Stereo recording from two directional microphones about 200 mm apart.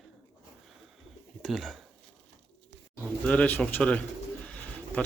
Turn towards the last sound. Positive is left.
turn(degrees=5)  # may be behind; listen again after turning